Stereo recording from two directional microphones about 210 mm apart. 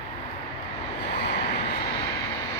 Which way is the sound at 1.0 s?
55° left (ahead or behind).